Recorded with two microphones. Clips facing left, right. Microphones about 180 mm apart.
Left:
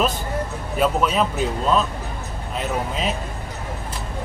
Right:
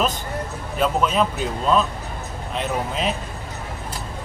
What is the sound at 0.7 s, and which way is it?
Speech, 5° left (ahead or behind).